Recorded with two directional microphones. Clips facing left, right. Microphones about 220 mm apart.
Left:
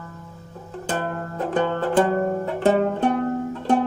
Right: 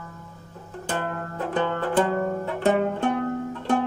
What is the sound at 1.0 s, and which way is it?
Music, 35° left (ahead or behind).